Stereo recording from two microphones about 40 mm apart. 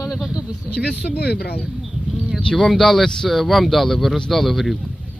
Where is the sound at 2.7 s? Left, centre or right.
Centre.